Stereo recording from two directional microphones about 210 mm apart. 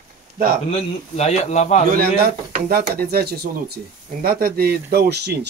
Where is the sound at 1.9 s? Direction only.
45° right (ahead or behind).